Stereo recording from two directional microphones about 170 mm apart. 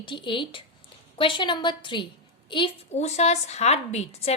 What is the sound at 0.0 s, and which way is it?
A woman's voice, 30° left (ahead or behind).